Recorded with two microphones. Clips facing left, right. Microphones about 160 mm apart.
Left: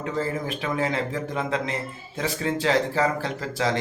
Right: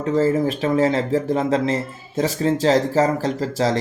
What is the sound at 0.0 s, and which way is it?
Speech, 40° right (ahead or behind).